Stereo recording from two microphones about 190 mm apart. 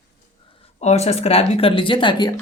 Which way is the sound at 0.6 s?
35° left (ahead or behind).